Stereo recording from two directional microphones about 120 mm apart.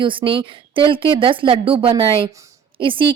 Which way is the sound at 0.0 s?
45° right (ahead or behind).